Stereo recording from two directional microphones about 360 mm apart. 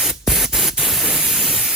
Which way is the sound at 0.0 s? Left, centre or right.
Centre.